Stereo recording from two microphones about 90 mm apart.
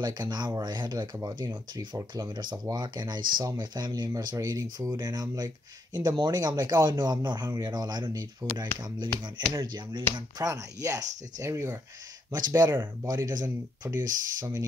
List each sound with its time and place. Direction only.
0.0 s speech: 55° right (ahead or behind)
2.0 s speech: 35° right (ahead or behind)
2.7 s speech: 50° right (ahead or behind)
10.4 s speech: 40° right (ahead or behind)
12.3 s speech: 50° right (ahead or behind)